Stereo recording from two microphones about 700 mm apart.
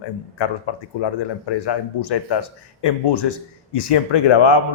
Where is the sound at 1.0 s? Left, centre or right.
Left.